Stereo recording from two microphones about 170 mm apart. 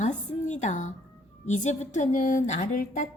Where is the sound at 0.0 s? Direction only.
45° left (ahead or behind).